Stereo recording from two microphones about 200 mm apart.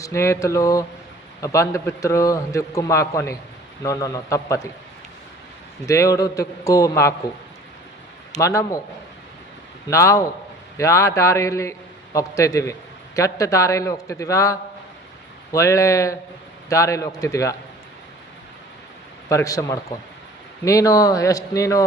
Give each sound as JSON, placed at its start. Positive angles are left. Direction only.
{"t": 0.0, "sound": "a man's voice", "side_deg": 15}
{"t": 5.8, "sound": "a man's voice", "side_deg": 15}
{"t": 8.4, "sound": "a man's voice", "side_deg": 15}
{"t": 9.9, "sound": "a man's voice", "side_deg": 15}
{"t": 19.3, "sound": "a man's voice", "side_deg": 15}